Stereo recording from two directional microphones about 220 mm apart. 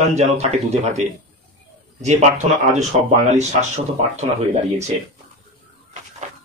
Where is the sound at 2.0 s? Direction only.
30° right (ahead or behind).